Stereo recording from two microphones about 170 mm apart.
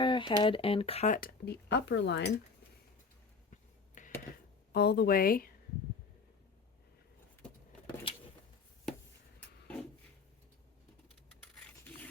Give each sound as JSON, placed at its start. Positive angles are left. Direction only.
{"t": 0.0, "sound": "speech", "side_deg": 30}
{"t": 1.1, "sound": "speech", "side_deg": 65}
{"t": 4.0, "sound": "a sound", "side_deg": 50}
{"t": 4.7, "sound": "speech", "side_deg": 70}
{"t": 8.1, "sound": "a sound", "side_deg": 30}
{"t": 11.6, "sound": "filing", "side_deg": 10}